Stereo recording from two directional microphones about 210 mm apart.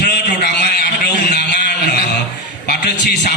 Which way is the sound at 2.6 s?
50° left (ahead or behind).